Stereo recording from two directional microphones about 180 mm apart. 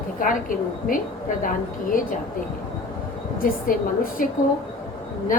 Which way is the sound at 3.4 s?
50° left (ahead or behind).